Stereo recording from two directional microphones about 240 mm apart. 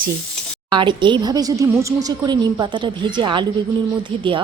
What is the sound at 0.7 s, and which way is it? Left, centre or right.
A woman's voice, centre.